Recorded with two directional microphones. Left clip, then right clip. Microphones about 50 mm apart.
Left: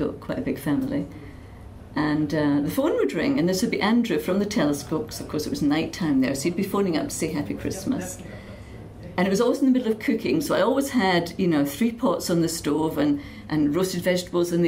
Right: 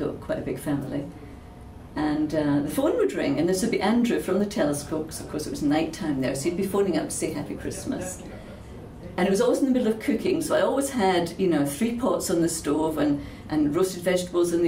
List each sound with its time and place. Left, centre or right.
0.7 s speech: left
2.0 s a woman's voice: left
9.1 s a woman's voice: left